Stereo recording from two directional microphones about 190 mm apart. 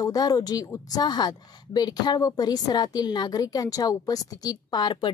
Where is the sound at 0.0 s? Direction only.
20° left (ahead or behind).